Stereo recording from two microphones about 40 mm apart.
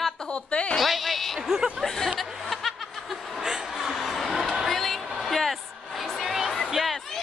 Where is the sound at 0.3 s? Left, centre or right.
Left.